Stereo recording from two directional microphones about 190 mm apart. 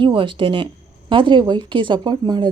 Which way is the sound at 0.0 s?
25° right (ahead or behind).